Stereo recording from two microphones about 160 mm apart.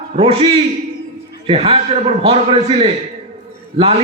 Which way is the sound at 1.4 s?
35° right (ahead or behind).